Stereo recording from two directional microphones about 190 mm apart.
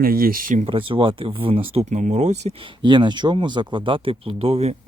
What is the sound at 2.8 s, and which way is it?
Speech, 25° right (ahead or behind).